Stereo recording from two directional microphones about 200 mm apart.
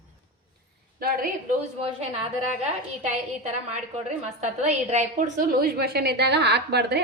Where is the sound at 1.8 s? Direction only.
30° right (ahead or behind).